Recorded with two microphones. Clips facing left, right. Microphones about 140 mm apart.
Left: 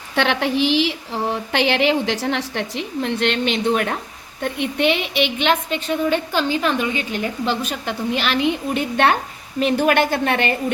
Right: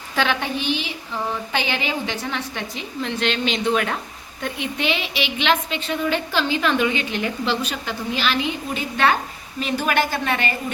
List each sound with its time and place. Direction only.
0.2 s a woman's voice: 75° left (ahead or behind); by 0.9 s 90° left
1.5 s a woman's voice: 75° left (ahead or behind); by 10.5 s 60° left (ahead or behind)